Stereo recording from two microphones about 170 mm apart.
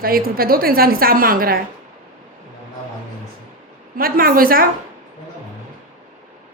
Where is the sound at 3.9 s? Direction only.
60° right (ahead or behind).